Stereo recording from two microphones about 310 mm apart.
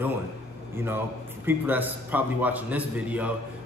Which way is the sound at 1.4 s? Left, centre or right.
Centre.